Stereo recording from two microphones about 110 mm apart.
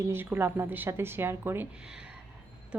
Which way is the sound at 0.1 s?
20° right (ahead or behind).